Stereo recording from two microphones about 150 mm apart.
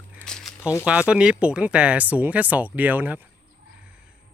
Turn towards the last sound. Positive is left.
turn(degrees=-10)  # may be behind; listen again after turning